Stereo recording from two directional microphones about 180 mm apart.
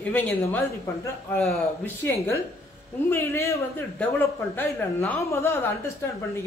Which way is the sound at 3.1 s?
15° left (ahead or behind).